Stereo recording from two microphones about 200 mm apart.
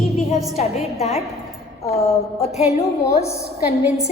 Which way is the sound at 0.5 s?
30° left (ahead or behind).